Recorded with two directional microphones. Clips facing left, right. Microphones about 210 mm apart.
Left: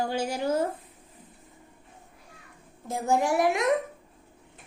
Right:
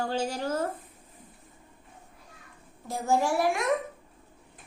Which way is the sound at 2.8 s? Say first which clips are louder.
Left 1 dB; 20° left (ahead or behind).